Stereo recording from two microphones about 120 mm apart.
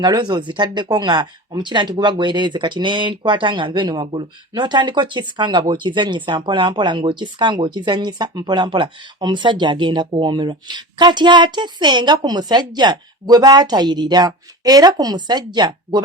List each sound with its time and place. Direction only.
0.0 s speech: 35° right (ahead or behind)